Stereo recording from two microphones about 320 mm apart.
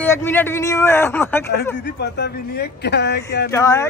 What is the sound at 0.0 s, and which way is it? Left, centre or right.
A man's voice, centre.